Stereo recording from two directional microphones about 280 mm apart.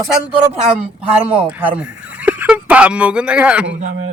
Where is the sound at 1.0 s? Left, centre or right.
Right.